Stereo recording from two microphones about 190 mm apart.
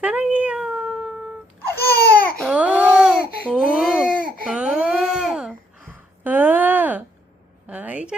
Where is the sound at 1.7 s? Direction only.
55° left (ahead or behind).